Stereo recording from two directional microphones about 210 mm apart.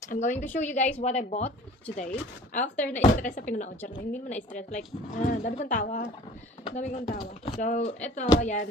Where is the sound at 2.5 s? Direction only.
35° left (ahead or behind).